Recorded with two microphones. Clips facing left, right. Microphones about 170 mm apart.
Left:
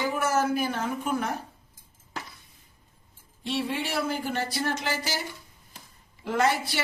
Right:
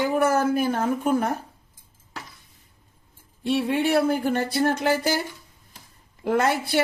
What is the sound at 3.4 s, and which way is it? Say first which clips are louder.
Speech: right 7 dB; 55° right (ahead or behind).